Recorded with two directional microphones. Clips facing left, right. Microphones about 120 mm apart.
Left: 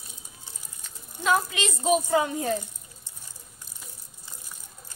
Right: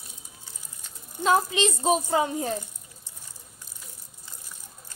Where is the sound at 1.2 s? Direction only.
30° right (ahead or behind).